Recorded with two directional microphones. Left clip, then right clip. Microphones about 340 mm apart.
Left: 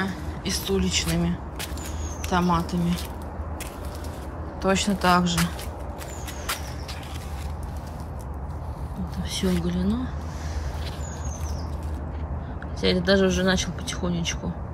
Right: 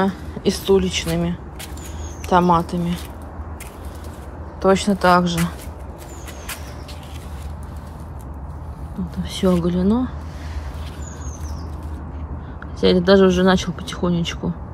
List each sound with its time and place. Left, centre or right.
0.0 s speech: centre
4.6 s speech: centre
9.2 s speech: centre
12.8 s speech: centre